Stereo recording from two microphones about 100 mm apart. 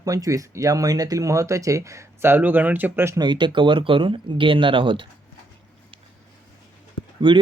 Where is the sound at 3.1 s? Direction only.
45° right (ahead or behind).